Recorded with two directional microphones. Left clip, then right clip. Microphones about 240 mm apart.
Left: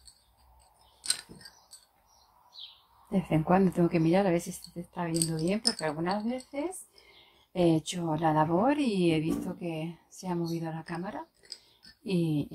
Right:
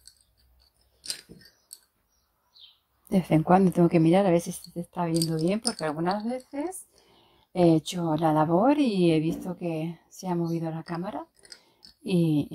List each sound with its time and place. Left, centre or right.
3.1 s a woman's voice: right